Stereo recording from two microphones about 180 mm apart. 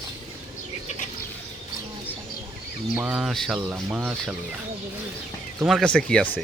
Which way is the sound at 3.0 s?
5° right (ahead or behind).